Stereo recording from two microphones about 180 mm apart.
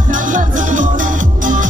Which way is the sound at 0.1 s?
45° right (ahead or behind).